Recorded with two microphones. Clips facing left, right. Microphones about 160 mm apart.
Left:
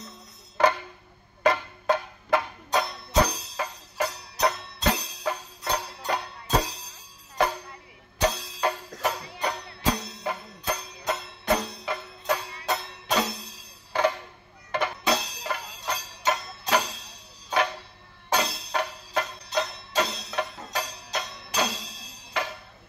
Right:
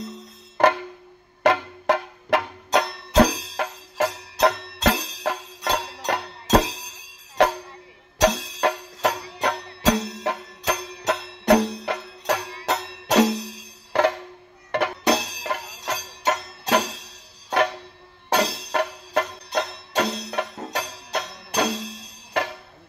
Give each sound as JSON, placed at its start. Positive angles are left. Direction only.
{"t": 1.4, "sound": "music", "side_deg": -70}
{"t": 7.4, "sound": "music", "side_deg": -75}
{"t": 18.3, "sound": "music", "side_deg": -65}